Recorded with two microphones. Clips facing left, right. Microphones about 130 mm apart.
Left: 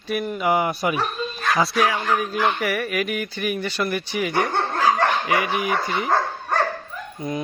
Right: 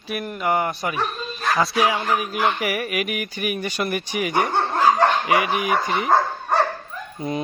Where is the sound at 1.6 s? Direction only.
Centre (ahead or behind).